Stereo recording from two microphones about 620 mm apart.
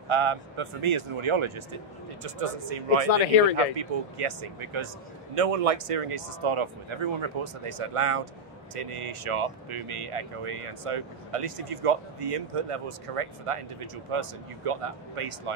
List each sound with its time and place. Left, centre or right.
0.1 s speech: right
2.2 s speech: right
3.1 s speech: left
3.7 s speech: right